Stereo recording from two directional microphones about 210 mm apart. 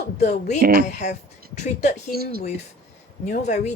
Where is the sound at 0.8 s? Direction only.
35° left (ahead or behind).